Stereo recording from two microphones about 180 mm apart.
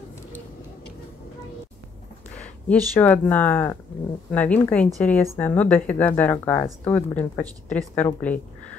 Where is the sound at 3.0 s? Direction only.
10° left (ahead or behind).